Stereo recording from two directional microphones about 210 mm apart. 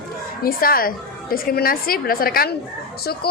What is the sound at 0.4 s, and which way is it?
A woman's voice, 45° left (ahead or behind).